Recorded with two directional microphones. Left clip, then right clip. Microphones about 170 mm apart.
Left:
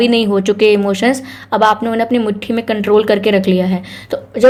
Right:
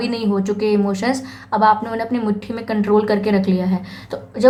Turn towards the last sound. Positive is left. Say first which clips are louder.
# left 8 dB
turn(degrees=25)  # may be behind; listen again after turning